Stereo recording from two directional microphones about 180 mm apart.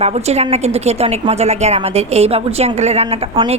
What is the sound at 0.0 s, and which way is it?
A woman's voice, 35° right (ahead or behind).